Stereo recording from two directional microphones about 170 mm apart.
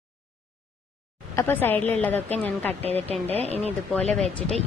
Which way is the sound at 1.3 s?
15° left (ahead or behind).